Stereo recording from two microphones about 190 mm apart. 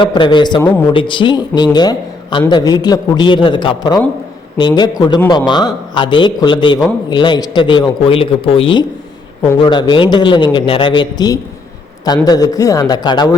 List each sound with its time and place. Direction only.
0.0 s a man's voice: 25° left (ahead or behind)